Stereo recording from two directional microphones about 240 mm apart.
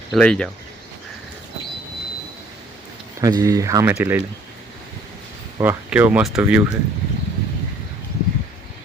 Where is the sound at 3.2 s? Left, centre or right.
Centre.